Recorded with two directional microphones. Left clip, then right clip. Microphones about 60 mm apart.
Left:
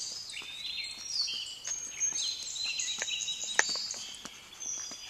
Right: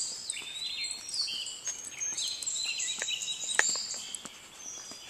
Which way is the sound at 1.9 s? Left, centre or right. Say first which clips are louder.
Left 2 dB; centre.